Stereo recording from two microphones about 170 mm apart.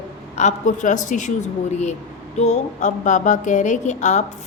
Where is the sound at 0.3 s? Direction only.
45° left (ahead or behind).